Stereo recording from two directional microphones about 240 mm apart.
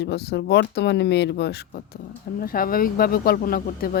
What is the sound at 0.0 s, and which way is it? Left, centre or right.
Speech, left.